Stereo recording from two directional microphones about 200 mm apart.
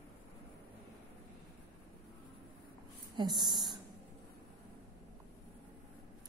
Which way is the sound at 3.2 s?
20° right (ahead or behind).